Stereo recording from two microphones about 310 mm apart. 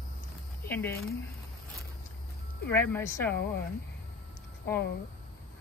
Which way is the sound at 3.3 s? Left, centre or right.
Left.